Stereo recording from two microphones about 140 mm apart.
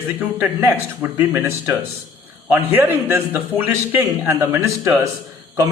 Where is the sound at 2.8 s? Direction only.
15° right (ahead or behind).